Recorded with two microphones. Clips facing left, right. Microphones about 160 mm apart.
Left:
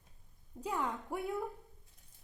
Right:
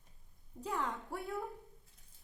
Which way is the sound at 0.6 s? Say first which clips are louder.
Left 2 dB; 15° left (ahead or behind).